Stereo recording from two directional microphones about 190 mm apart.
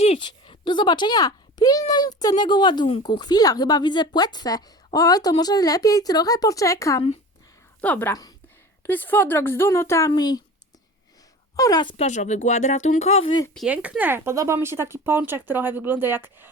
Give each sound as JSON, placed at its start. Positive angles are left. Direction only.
{"t": 0.0, "sound": "speech", "side_deg": 35}
{"t": 0.3, "sound": "speech", "side_deg": 25}
{"t": 11.5, "sound": "speech", "side_deg": 20}
{"t": 12.0, "sound": "speech", "side_deg": 40}
{"t": 13.2, "sound": "speech", "side_deg": 20}
{"t": 13.7, "sound": "speech", "side_deg": -5}